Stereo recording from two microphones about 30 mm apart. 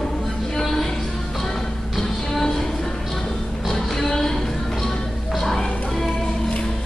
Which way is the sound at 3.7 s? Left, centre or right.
Centre.